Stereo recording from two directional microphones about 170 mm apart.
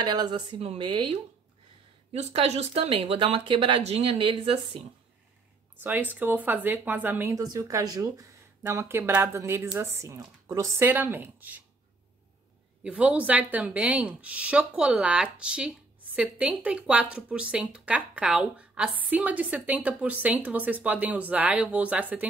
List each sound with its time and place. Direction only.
0.0 s a woman's voice: 25° right (ahead or behind)
2.1 s speech: 40° right (ahead or behind)
5.8 s speech: 10° right (ahead or behind)
12.8 s speech: 10° right (ahead or behind)